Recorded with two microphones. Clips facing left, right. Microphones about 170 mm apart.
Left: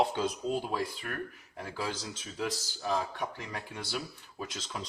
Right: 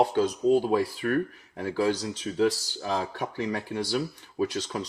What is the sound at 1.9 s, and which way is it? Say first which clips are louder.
Speech: right 9 dB; centre (ahead or behind).